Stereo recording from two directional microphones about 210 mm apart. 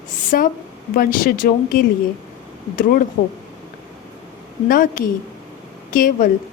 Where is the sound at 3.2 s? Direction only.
50° left (ahead or behind).